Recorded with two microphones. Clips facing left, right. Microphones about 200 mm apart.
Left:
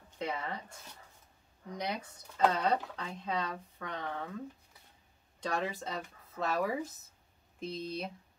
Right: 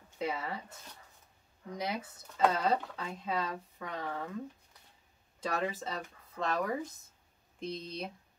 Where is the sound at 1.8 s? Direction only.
5° right (ahead or behind).